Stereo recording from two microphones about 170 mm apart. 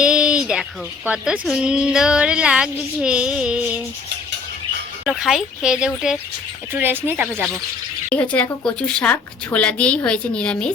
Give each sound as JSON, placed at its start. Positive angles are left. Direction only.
{"t": 0.0, "sound": "a sound", "side_deg": -5}
{"t": 1.0, "sound": "a woman's voice", "side_deg": -5}
{"t": 5.0, "sound": "a woman's voice", "side_deg": -5}
{"t": 8.1, "sound": "a woman's voice", "side_deg": 10}